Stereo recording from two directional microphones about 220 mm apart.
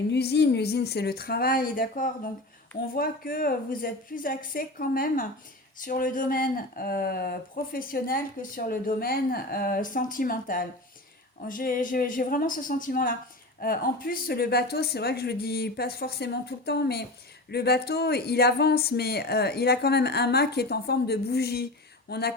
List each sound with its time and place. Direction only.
0.1 s speech: 50° left (ahead or behind)